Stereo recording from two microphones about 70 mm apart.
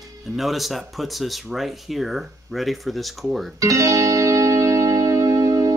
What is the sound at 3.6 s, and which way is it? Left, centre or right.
Music, right.